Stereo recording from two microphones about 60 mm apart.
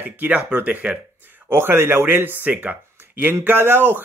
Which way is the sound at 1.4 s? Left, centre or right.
Right.